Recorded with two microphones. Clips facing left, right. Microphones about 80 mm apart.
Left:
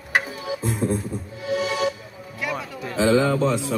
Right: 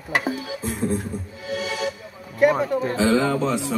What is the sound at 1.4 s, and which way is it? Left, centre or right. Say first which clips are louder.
Speech: left 4 dB; centre.